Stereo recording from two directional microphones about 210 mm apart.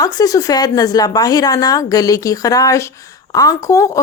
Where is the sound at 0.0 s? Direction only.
15° left (ahead or behind).